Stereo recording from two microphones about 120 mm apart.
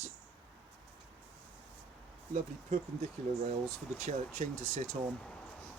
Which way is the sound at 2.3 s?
75° right (ahead or behind).